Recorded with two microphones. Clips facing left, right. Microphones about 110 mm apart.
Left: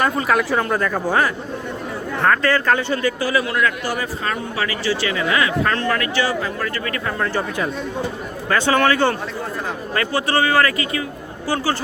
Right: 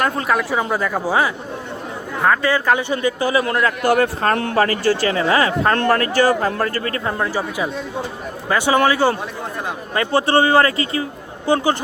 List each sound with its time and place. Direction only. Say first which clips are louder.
0.0 s speech: left 1 dB; centre (ahead or behind)
0.6 s a man's voice: even; 10° right (ahead or behind); by 3.4 s 25° right (ahead or behind)
3.4 s speech: right 1 dB; 40° right (ahead or behind)
3.8 s speech: right 8 dB; 60° right (ahead or behind)
4.5 s speech: right 6 dB; 45° right (ahead or behind); by 7.3 s 25° right (ahead or behind)
8.4 s a man's voice: right 1 dB; 15° right (ahead or behind)
9.9 s a man's voice: right 4 dB; 25° right (ahead or behind)